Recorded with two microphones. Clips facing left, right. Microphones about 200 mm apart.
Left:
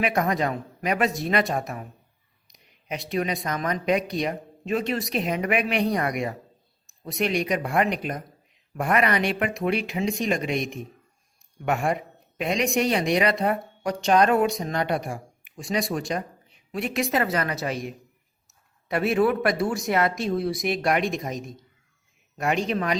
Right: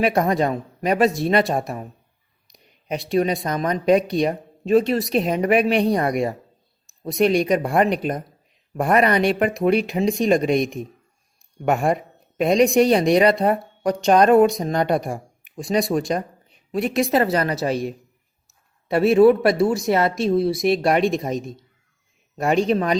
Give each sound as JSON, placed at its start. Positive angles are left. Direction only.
{"t": 0.0, "sound": "speech", "side_deg": -30}